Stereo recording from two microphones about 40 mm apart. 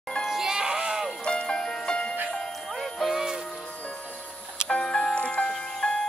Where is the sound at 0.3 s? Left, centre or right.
Centre.